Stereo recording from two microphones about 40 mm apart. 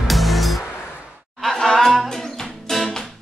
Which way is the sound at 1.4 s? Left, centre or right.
Centre.